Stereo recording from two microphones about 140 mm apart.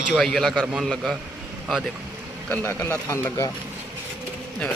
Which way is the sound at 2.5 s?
15° left (ahead or behind).